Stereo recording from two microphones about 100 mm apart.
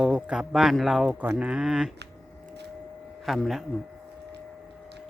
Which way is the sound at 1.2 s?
15° right (ahead or behind).